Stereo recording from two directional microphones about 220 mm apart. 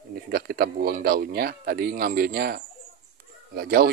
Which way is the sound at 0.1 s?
45° right (ahead or behind).